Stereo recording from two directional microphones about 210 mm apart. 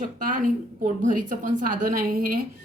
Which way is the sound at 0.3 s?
40° right (ahead or behind).